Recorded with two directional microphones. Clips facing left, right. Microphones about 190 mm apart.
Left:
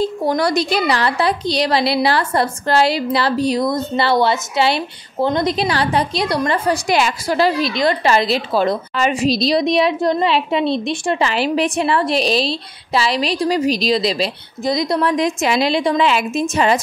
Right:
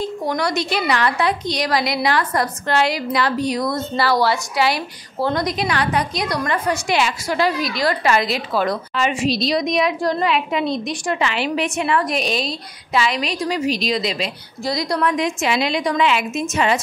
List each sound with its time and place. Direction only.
0.0 s a woman's voice: 30° left (ahead or behind)
8.9 s a woman's voice: 40° left (ahead or behind)
14.6 s a woman's voice: 20° left (ahead or behind)